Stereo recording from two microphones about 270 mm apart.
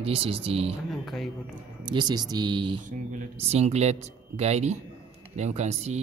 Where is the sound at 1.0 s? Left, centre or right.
Centre.